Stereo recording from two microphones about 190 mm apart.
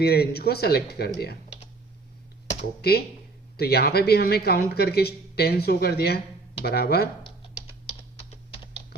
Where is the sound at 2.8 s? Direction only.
55° left (ahead or behind).